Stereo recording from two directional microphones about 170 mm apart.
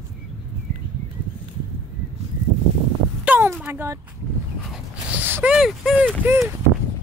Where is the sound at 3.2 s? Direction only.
10° right (ahead or behind).